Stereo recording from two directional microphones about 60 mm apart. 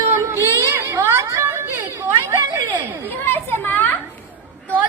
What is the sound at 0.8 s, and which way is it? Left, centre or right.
Chatter, right.